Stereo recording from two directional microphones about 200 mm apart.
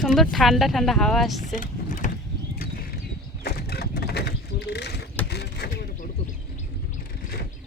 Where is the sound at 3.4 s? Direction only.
55° left (ahead or behind).